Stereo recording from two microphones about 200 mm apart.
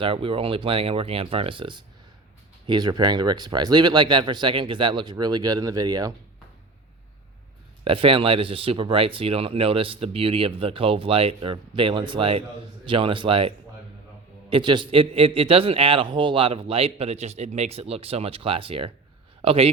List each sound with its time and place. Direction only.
0.0 s speech: 25° right (ahead or behind)
7.9 s speech: 25° right (ahead or behind)
14.5 s speech: 25° right (ahead or behind)